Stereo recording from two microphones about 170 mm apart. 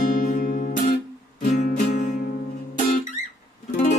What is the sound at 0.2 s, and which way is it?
Music, 50° left (ahead or behind).